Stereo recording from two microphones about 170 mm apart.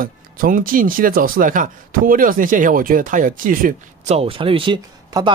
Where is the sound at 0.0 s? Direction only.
55° right (ahead or behind).